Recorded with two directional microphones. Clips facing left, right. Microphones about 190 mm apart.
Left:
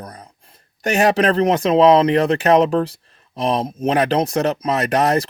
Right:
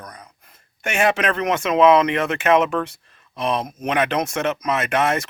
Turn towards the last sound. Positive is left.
turn(degrees=35)  # may be behind; listen again after turning